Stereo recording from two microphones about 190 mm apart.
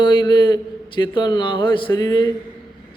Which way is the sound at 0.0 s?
25° left (ahead or behind).